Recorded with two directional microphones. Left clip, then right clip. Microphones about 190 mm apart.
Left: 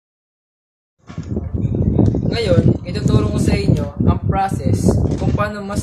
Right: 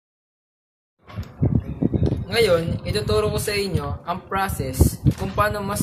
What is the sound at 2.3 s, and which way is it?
Speech, 15° right (ahead or behind).